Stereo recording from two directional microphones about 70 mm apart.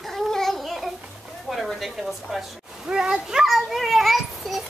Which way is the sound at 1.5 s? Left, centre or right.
Centre.